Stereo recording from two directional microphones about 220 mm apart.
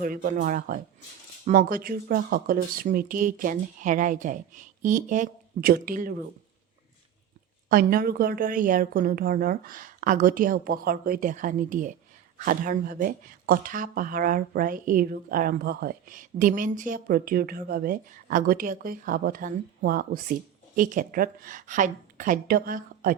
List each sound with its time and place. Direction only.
0.0 s speech: 40° right (ahead or behind)
7.7 s speech: 40° right (ahead or behind)